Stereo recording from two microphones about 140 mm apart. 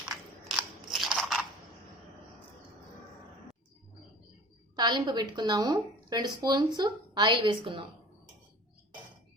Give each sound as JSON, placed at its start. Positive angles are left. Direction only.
{"t": 0.1, "sound": "biting", "side_deg": 0}
{"t": 4.8, "sound": "a woman's voice", "side_deg": -30}